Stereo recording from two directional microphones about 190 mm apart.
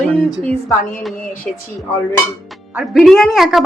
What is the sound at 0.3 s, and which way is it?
Speech, 20° left (ahead or behind).